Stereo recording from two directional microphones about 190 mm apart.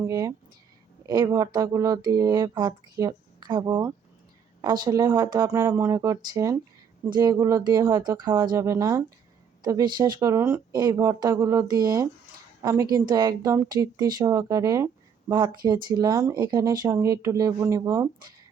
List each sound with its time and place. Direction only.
0.1 s speech: 20° right (ahead or behind)